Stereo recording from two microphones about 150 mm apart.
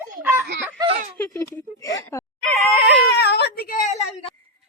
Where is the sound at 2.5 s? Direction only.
Centre (ahead or behind).